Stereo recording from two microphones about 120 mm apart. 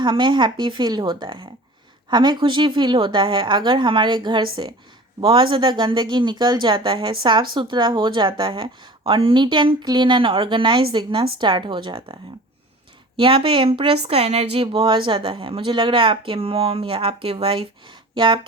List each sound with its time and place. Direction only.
0.0 s speech: 40° right (ahead or behind)